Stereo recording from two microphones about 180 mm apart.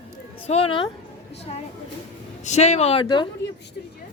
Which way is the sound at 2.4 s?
40° left (ahead or behind).